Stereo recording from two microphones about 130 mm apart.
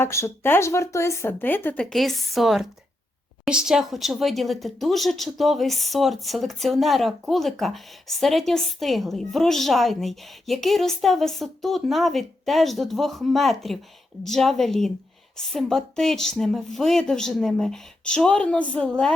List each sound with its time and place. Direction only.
0.0 s speech: 20° left (ahead or behind)